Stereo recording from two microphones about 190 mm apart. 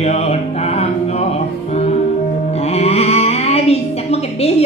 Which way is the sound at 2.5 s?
35° left (ahead or behind).